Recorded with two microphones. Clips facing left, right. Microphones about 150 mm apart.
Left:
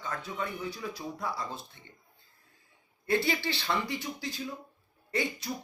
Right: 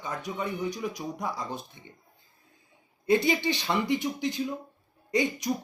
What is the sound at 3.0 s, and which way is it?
Speech, 20° right (ahead or behind).